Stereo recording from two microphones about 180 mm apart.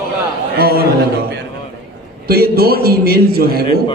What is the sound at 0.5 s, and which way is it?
Speech, 60° right (ahead or behind).